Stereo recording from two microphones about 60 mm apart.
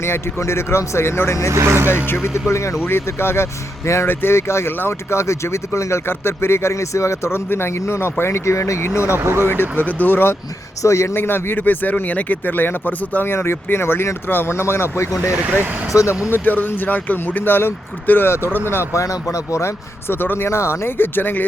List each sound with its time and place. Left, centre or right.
0.0 s speech: left
1.5 s speech: right
2.5 s speech: left
2.8 s speech: left
4.0 s speech: left
9.1 s speech: right
9.4 s speech: left
10.8 s a man's voice: left
11.1 s speech: left
13.3 s speech: left
15.9 s a man's voice: left
16.3 s speech: left
18.9 s speech: left